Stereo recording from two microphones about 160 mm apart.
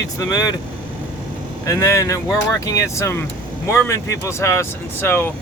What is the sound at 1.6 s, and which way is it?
Speech, 20° left (ahead or behind).